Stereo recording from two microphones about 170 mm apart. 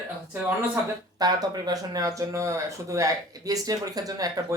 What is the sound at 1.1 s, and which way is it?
Speech, 25° right (ahead or behind).